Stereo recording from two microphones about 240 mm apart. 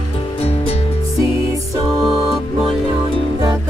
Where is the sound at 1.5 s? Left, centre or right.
Centre.